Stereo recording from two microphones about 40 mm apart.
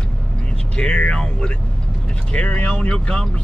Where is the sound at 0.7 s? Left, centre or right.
Left.